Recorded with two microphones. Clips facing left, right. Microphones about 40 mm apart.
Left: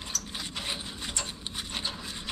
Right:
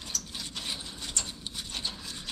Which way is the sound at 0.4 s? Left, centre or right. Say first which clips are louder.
Left 3 dB; left.